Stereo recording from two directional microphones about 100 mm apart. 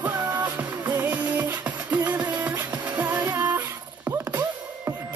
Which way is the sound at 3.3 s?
20° right (ahead or behind).